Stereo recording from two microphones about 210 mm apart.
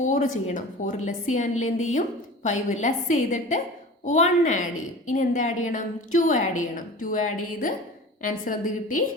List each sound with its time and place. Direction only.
0.0 s a woman's voice: 35° left (ahead or behind)